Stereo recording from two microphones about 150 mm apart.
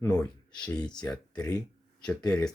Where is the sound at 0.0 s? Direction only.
15° left (ahead or behind).